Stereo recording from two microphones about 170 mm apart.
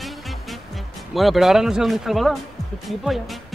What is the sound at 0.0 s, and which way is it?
Music, centre (ahead or behind).